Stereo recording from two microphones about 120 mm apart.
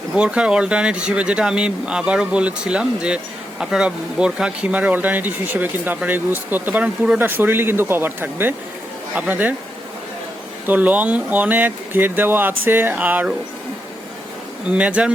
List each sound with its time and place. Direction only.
0.1 s speech: 10° right (ahead or behind)
10.7 s speech: 15° right (ahead or behind)
14.7 s speech: 10° right (ahead or behind)